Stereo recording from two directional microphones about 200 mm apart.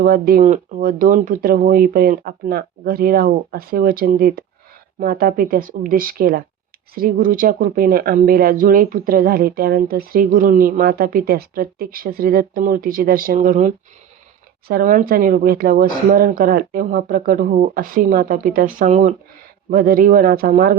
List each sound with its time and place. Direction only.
0.0 s speech: 45° right (ahead or behind)